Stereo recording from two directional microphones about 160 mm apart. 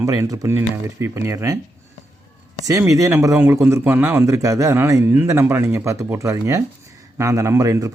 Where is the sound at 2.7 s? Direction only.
20° right (ahead or behind).